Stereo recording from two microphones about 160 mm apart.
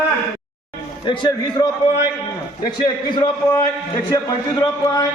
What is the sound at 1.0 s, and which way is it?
Speech, 30° left (ahead or behind).